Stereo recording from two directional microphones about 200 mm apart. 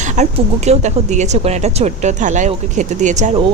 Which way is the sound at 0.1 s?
35° right (ahead or behind).